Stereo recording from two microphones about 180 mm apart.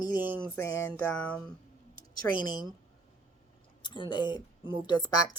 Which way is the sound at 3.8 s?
25° left (ahead or behind).